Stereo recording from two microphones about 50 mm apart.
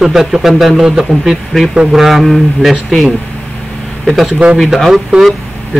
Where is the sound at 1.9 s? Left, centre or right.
Centre.